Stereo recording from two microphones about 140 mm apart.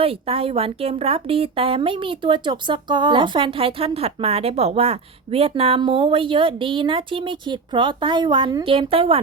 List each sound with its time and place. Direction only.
0.0 s speech: 40° right (ahead or behind)